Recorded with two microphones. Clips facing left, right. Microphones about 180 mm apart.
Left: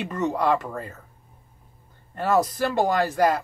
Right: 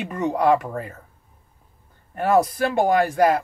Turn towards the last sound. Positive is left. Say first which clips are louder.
# right 3 dB
turn(degrees=-10)  # may be behind; listen again after turning